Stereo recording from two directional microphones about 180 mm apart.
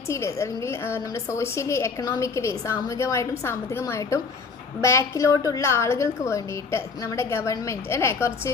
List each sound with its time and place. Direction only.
0.1 s a woman's voice: 15° left (ahead or behind)